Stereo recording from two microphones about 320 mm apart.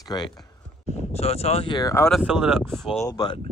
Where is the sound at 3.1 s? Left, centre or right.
Centre.